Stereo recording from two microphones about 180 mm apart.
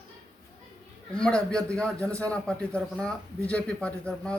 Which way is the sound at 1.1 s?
5° left (ahead or behind).